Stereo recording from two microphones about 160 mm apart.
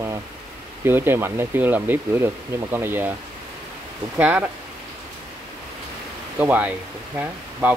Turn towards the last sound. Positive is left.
turn(degrees=-10)  # may be behind; listen again after turning